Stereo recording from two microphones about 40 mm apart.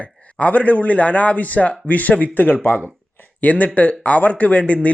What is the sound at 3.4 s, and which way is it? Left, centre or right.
Speech, left.